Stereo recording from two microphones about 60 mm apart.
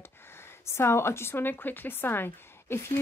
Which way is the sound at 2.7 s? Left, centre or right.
Left.